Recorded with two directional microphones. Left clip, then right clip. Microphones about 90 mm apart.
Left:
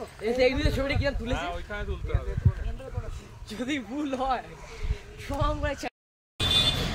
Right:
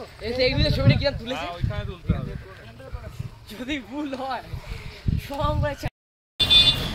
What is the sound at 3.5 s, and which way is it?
Speech, 10° right (ahead or behind).